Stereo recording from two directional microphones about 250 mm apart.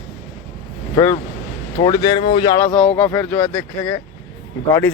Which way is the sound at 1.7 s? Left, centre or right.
Centre.